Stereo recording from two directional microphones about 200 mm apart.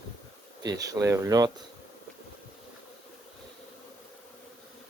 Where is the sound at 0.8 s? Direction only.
15° right (ahead or behind).